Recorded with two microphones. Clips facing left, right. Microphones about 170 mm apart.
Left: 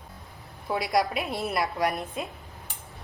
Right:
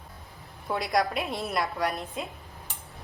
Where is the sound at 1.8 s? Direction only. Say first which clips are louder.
Left 2 dB; 20° left (ahead or behind).